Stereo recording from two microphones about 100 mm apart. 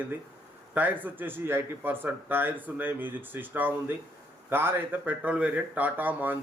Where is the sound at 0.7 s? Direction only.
15° right (ahead or behind).